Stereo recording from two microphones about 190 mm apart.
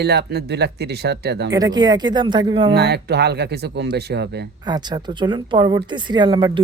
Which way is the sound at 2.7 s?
60° right (ahead or behind).